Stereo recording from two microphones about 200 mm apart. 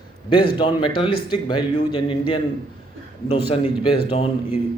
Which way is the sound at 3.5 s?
30° left (ahead or behind).